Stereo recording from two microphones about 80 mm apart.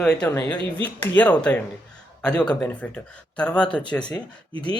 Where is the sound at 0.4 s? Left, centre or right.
Left.